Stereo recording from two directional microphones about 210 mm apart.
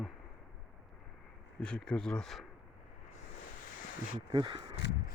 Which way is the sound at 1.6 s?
5° left (ahead or behind).